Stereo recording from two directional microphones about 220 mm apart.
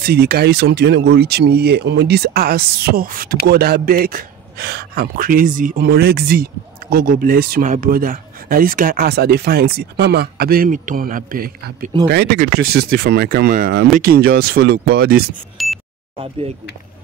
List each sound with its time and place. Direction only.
0.0 s a man's voice: 45° right (ahead or behind)
15.5 s beep: centre (ahead or behind)